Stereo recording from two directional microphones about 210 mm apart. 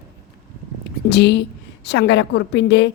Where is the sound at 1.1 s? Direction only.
55° left (ahead or behind).